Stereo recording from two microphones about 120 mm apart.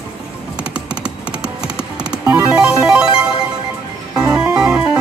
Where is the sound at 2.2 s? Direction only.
30° right (ahead or behind).